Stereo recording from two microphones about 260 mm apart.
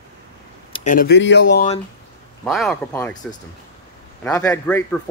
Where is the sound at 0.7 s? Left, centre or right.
Left.